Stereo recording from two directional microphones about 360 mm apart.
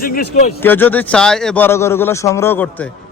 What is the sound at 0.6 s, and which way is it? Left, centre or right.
Speech, centre.